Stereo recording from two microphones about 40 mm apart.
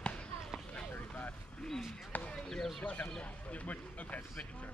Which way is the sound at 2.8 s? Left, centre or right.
Left.